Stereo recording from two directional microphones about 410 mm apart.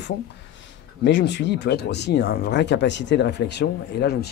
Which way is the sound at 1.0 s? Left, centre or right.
Left.